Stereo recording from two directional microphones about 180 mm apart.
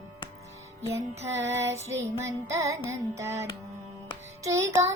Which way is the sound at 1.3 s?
15° right (ahead or behind).